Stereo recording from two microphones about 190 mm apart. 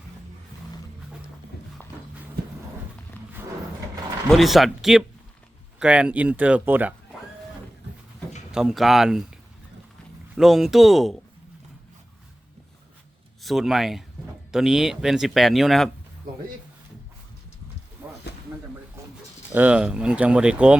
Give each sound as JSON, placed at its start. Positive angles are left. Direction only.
{"t": 3.2, "sound": "roaring cats", "side_deg": 10}
{"t": 4.3, "sound": "speech", "side_deg": 0}
{"t": 8.5, "sound": "speech", "side_deg": 0}
{"t": 13.4, "sound": "speech", "side_deg": 0}
{"t": 18.3, "sound": "a sound", "side_deg": 60}
{"t": 19.0, "sound": "sheep", "side_deg": -15}
{"t": 19.5, "sound": "speech", "side_deg": -5}